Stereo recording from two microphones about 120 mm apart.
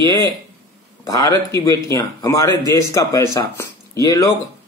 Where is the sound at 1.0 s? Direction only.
30° left (ahead or behind).